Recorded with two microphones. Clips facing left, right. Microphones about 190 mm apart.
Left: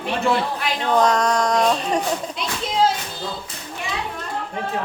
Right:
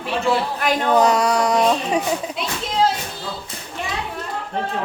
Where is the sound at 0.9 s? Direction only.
10° right (ahead or behind).